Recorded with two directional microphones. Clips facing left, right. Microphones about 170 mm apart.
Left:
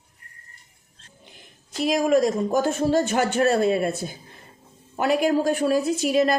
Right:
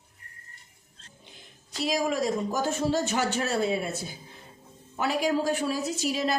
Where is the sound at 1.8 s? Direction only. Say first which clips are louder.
Left 7 dB; 55° left (ahead or behind).